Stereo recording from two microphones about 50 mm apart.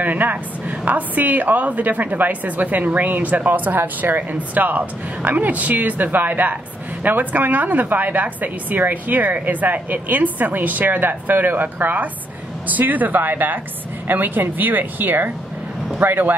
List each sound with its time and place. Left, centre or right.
0.0 s a woman's voice: right